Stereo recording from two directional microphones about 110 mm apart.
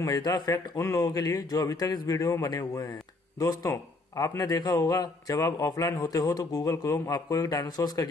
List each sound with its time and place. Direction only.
0.0 s a man's voice: 35° left (ahead or behind)